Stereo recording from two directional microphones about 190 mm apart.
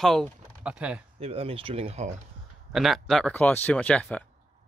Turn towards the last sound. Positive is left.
turn(degrees=5)  # may be behind; listen again after turning